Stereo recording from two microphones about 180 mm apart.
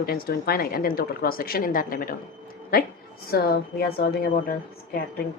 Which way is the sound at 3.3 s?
60° left (ahead or behind).